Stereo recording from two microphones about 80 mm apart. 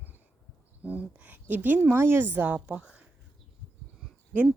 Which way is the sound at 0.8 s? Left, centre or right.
Centre.